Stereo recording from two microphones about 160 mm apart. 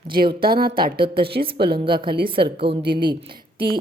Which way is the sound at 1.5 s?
85° right.